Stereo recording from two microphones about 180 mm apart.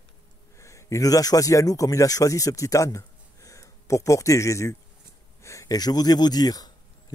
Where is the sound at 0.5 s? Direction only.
15° left (ahead or behind).